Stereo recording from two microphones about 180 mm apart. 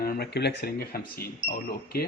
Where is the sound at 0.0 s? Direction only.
65° left (ahead or behind).